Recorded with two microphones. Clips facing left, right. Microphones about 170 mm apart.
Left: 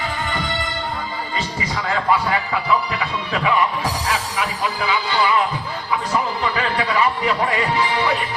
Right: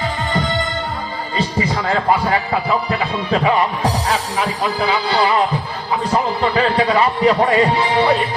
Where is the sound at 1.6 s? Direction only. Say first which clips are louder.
Right 5 dB; 35° right (ahead or behind).